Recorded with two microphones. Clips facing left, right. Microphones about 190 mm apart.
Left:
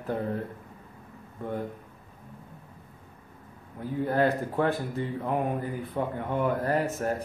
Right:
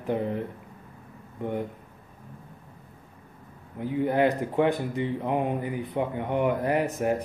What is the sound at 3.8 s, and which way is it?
Speech, 15° right (ahead or behind).